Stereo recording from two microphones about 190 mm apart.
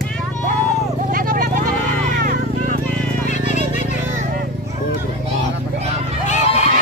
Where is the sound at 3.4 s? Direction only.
40° left (ahead or behind).